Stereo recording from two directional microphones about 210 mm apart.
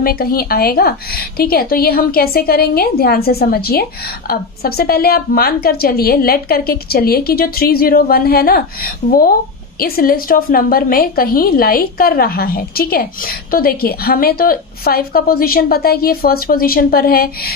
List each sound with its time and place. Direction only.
0.0 s a woman's voice: 45° left (ahead or behind)